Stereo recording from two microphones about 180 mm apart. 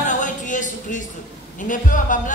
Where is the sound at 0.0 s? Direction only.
45° left (ahead or behind).